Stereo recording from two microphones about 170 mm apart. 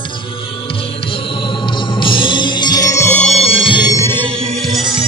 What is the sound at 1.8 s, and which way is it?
Music, 30° left (ahead or behind).